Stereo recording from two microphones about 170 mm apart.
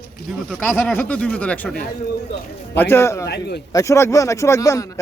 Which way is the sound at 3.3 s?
75° left (ahead or behind).